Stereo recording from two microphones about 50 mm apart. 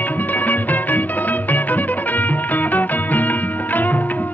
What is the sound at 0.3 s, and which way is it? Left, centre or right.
Music, left.